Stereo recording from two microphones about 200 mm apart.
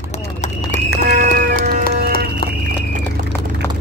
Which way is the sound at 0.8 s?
45° right (ahead or behind).